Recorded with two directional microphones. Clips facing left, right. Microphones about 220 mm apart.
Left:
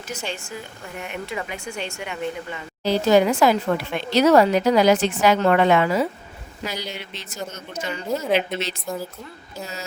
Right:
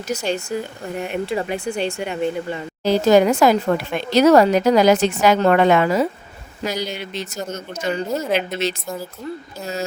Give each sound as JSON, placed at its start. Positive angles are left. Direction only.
{"t": 0.1, "sound": "speech", "side_deg": -40}
{"t": 8.2, "sound": "a woman's voice", "side_deg": 0}